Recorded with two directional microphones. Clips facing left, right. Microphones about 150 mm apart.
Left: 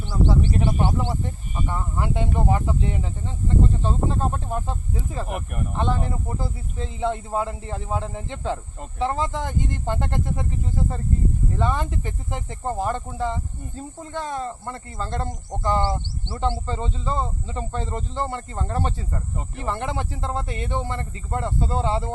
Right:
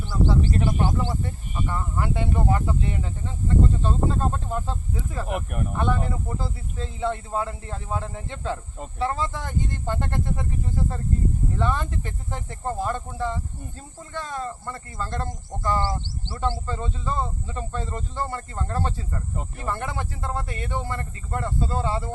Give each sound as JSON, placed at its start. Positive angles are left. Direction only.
{"t": 0.6, "sound": "speech", "side_deg": 25}
{"t": 11.5, "sound": "speech", "side_deg": 15}